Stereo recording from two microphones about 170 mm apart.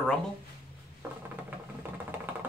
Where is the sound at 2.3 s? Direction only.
10° right (ahead or behind).